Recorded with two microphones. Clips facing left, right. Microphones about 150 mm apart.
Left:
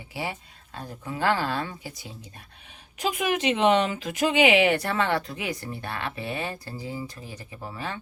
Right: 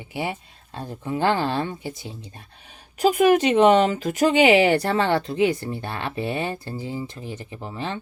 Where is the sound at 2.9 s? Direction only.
40° right (ahead or behind).